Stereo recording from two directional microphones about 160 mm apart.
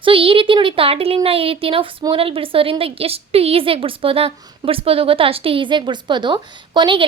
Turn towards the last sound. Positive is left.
turn(degrees=-30)  # may be behind; listen again after turning